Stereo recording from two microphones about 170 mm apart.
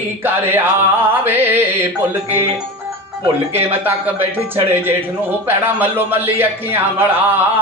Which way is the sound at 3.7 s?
10° right (ahead or behind).